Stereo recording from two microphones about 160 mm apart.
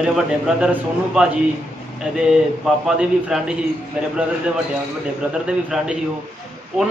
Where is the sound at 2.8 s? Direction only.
5° right (ahead or behind).